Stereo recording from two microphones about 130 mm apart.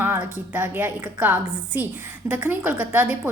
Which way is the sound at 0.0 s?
15° right (ahead or behind).